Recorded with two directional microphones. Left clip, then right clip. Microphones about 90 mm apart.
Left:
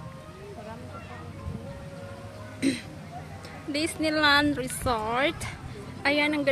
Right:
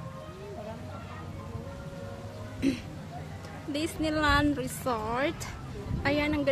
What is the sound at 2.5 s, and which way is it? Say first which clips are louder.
Speech: left 2 dB; 30° left (ahead or behind).